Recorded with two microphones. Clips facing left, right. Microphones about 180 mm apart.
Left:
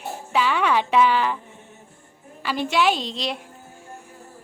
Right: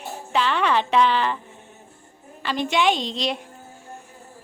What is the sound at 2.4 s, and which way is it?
Speech, 10° left (ahead or behind).